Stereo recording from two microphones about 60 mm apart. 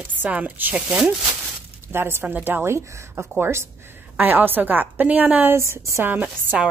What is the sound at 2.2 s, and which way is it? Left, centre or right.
A woman's voice, right.